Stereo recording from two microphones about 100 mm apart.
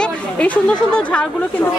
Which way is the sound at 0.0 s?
10° left (ahead or behind).